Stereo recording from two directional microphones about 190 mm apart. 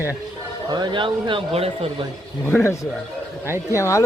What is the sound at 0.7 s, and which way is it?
Speech, 20° right (ahead or behind).